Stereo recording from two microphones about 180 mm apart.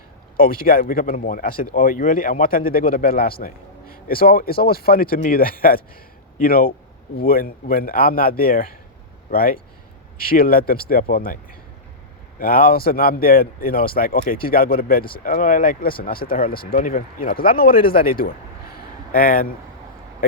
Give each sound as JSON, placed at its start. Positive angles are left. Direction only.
{"t": 0.3, "sound": "speech", "side_deg": 55}
{"t": 12.4, "sound": "speech", "side_deg": 55}